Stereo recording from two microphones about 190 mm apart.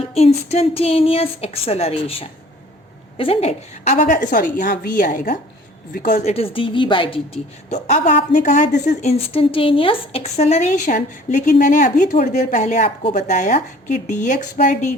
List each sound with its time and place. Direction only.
0.0 s a woman's voice: 30° left (ahead or behind)
7.7 s speech: 40° left (ahead or behind)